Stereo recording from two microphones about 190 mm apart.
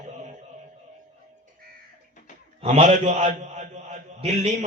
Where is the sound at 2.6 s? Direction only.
40° right (ahead or behind).